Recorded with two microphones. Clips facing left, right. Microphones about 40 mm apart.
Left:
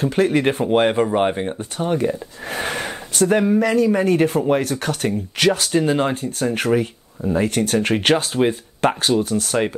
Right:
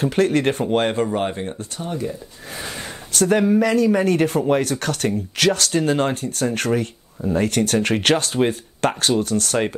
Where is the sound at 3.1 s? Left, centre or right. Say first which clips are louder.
Even; centre.